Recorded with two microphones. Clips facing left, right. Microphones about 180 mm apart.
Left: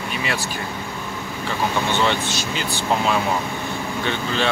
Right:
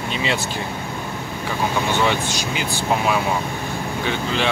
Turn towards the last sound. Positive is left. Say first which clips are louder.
# right 1 dB
turn(degrees=-15)  # may be behind; listen again after turning